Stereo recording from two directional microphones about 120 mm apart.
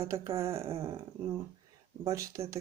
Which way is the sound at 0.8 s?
25° right (ahead or behind).